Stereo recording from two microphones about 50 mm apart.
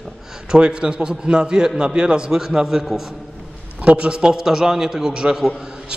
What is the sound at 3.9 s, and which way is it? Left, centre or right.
A man's voice, centre.